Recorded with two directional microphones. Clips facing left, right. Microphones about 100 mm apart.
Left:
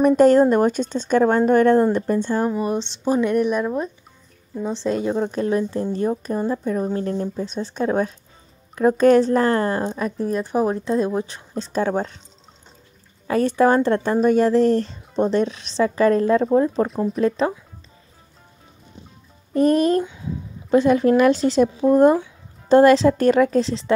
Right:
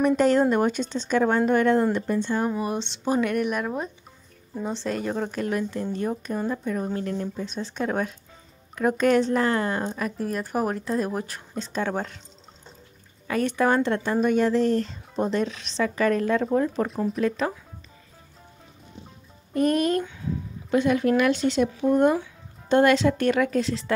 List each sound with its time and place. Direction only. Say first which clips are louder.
0.0 s a woman's voice: left 6 dB; 45° left (ahead or behind)
2.4 s speech: left 4 dB; 25° left (ahead or behind)
2.7 s speech: left 4 dB; 15° right (ahead or behind)
3.2 s speech: left 5 dB; 25° left (ahead or behind)
4.7 s speech: left 7 dB; 20° left (ahead or behind)
13.3 s speech: left 5 dB; 35° left (ahead or behind)
19.5 s speech: left 5 dB; 30° left (ahead or behind)